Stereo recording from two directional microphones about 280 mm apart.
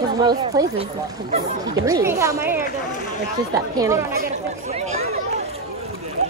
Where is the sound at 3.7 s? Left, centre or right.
Centre.